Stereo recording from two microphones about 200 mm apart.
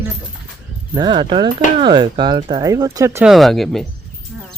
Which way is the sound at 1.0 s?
20° right (ahead or behind).